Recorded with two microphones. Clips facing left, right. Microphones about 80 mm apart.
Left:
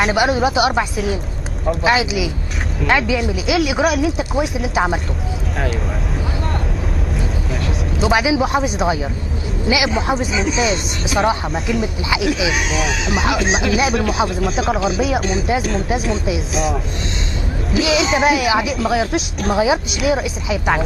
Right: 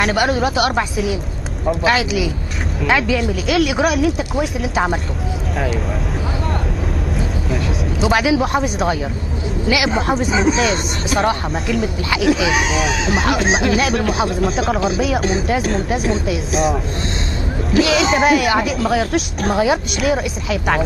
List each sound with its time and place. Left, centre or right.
0.0 s speech: centre
7.5 s speech: centre
10.0 s speech: centre
12.3 s speech: right
13.7 s speech: centre
14.0 s speech: right
14.4 s speech: centre